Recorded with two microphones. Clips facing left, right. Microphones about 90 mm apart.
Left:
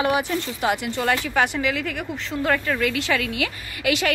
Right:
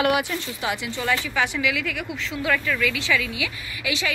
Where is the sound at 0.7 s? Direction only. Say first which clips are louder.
Left 3 dB; 50° left (ahead or behind).